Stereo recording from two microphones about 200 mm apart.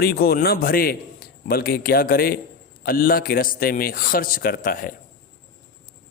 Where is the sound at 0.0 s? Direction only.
50° left (ahead or behind).